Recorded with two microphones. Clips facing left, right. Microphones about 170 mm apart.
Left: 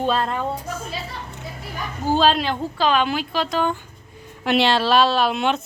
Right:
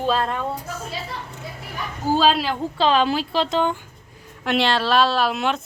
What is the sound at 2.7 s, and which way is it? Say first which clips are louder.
A woman's voice: right 2 dB; 30° right (ahead or behind).